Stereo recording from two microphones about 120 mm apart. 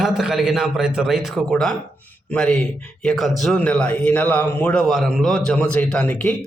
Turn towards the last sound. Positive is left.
turn(degrees=10)  # may be behind; listen again after turning